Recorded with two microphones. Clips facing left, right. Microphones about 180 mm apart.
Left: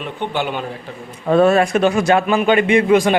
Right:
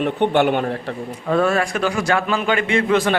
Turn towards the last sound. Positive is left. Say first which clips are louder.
# left 4 dB
turn(degrees=15)  # may be behind; listen again after turning